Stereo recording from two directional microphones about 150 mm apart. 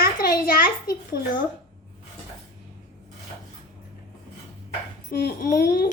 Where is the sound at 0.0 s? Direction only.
90° left.